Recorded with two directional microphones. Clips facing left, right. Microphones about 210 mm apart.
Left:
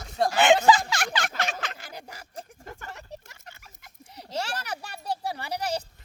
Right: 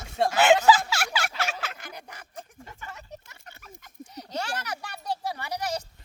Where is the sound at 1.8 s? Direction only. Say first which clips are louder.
Left 1 dB; 30° left (ahead or behind).